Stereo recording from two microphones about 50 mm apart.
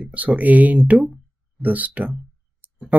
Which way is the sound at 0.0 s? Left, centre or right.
Right.